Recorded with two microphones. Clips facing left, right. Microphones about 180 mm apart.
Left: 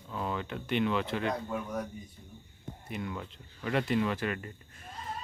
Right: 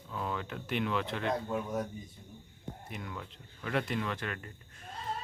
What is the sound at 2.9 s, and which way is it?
Speech, 5° left (ahead or behind).